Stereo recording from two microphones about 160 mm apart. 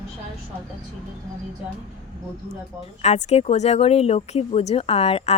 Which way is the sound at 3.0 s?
45° left (ahead or behind).